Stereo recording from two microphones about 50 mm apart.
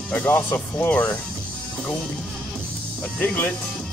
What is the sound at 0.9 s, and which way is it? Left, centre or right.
Speech, left.